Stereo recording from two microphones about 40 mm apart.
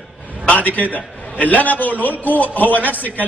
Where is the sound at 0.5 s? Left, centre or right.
Left.